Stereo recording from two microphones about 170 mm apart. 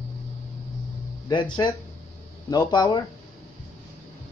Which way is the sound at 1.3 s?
30° left (ahead or behind).